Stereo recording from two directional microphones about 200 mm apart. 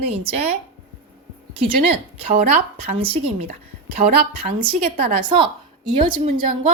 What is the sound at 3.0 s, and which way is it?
A woman's voice, 30° right (ahead or behind).